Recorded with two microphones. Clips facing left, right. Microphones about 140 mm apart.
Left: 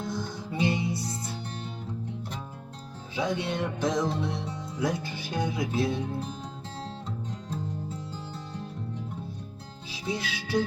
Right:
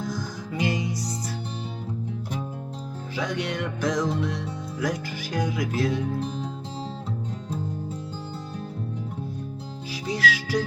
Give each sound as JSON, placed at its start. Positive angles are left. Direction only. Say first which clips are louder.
{"t": 0.1, "sound": "music", "louder": "right 1 dB", "side_deg": 25}
{"t": 3.2, "sound": "music", "louder": "even", "side_deg": 25}
{"t": 9.9, "sound": "music", "louder": "right 6 dB", "side_deg": 25}